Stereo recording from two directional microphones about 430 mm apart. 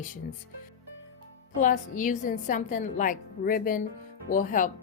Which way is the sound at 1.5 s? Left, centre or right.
Centre.